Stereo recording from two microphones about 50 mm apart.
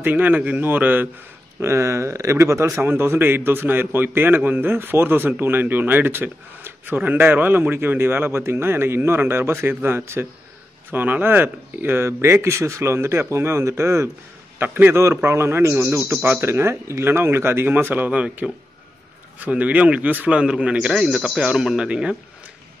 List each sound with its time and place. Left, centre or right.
0.0 s a man's voice: right
1.6 s speech: right
2.7 s speech: right
10.9 s speech: right
12.1 s a man's voice: right
14.6 s speech: right
16.3 s speech: right
18.4 s speech: centre
19.5 s speech: right
20.9 s speech: centre